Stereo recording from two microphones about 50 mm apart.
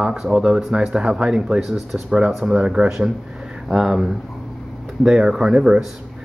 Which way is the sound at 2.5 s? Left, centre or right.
Centre.